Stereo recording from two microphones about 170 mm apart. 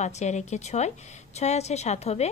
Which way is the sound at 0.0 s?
45° left (ahead or behind).